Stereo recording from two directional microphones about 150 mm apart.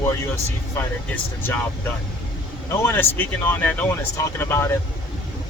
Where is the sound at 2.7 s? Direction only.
15° left (ahead or behind).